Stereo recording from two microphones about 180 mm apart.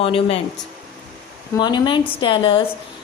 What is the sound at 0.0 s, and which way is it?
Speech, 30° left (ahead or behind).